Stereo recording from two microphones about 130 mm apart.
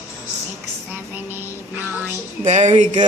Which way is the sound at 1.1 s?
15° right (ahead or behind).